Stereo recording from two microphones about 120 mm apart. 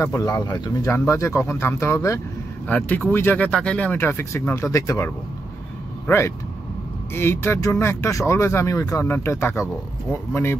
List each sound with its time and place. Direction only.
0.0 s speech: 25° left (ahead or behind)